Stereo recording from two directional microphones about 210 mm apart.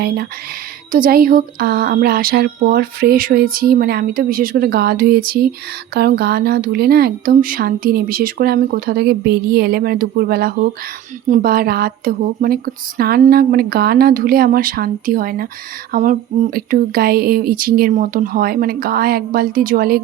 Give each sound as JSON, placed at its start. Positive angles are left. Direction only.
{"t": 0.9, "sound": "speech", "side_deg": -40}